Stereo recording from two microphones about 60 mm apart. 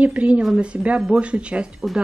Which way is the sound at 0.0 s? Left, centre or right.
Right.